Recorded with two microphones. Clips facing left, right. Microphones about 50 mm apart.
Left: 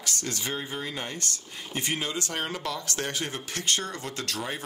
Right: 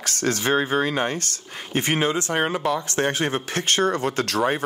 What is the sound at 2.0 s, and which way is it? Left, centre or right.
Speech, right.